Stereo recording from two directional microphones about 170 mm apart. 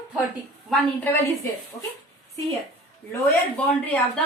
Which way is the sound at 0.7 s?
Centre (ahead or behind).